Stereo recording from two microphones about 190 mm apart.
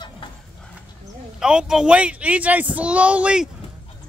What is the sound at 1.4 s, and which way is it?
Speech, 5° right (ahead or behind).